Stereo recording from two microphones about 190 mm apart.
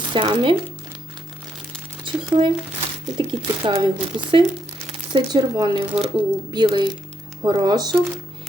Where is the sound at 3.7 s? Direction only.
25° right (ahead or behind).